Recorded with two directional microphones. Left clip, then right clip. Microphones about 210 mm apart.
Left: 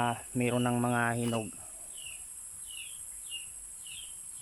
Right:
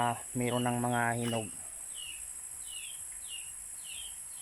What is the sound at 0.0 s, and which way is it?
Speech, 5° left (ahead or behind).